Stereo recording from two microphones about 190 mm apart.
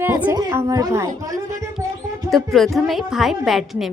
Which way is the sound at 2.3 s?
Centre (ahead or behind).